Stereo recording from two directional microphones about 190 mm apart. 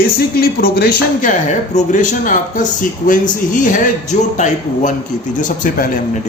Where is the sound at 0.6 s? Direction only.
50° left (ahead or behind).